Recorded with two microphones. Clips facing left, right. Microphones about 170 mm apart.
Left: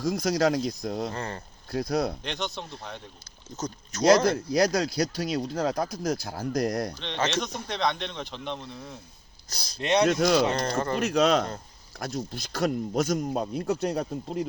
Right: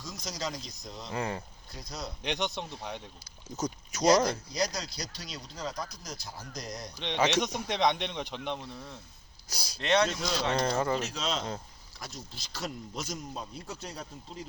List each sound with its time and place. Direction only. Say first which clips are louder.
0.0 s speech: left 14 dB; 60° left (ahead or behind)
1.1 s speech: right 1 dB; 10° right (ahead or behind)
1.7 s speech: left 14 dB; 60° left (ahead or behind)
2.2 s speech: even; 15° right (ahead or behind)
4.3 s speech: left 9 dB; 60° left (ahead or behind)
6.9 s speech: right 1 dB; 15° right (ahead or behind)
9.8 s speech: left 3 dB; 15° left (ahead or behind)
10.1 s speech: left 11 dB; 65° left (ahead or behind)
10.5 s speech: left 1 dB; 10° right (ahead or behind)
10.9 s speech: left 10 dB; 60° left (ahead or behind)